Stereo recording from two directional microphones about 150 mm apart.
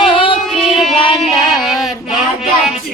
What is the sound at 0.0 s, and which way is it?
Music, 35° left (ahead or behind).